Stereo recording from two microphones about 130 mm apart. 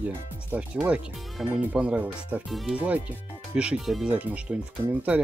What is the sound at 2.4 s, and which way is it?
Speech, centre (ahead or behind).